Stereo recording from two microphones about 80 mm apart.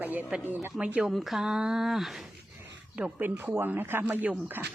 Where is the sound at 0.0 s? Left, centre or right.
Right.